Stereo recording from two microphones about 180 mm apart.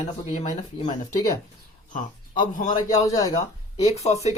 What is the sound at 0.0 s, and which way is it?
Speech, 40° left (ahead or behind).